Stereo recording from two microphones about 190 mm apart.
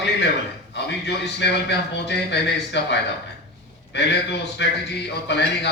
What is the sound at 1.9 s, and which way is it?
A man's voice, 65° left (ahead or behind).